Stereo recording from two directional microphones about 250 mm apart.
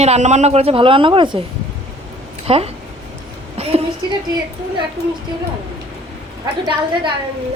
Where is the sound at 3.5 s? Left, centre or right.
Right.